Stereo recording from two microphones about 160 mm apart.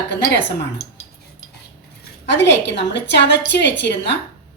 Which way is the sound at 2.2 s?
90° left.